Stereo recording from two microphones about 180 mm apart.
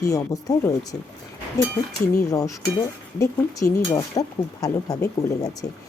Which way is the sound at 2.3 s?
20° left (ahead or behind).